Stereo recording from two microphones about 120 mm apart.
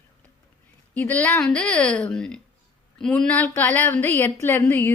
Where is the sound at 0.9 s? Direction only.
15° left (ahead or behind).